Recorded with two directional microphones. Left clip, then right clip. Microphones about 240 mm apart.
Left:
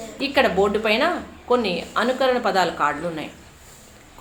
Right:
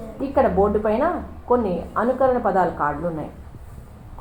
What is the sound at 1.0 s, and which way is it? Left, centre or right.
A woman's voice, left.